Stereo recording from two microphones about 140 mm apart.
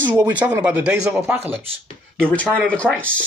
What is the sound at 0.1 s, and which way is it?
Speech, 10° right (ahead or behind).